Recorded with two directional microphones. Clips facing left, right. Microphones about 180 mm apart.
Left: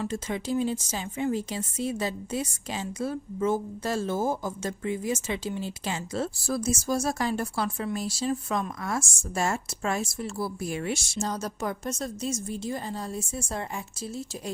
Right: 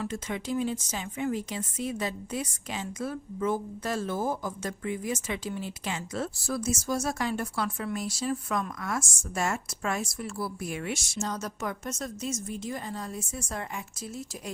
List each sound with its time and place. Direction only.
0.0 s a woman's voice: 30° left (ahead or behind)